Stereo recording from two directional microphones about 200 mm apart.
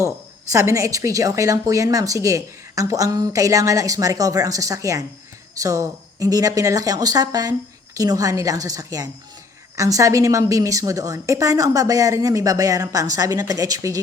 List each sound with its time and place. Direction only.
0.5 s a woman's voice: 15° right (ahead or behind)